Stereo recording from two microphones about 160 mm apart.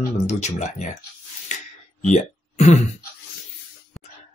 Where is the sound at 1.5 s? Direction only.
45° left (ahead or behind).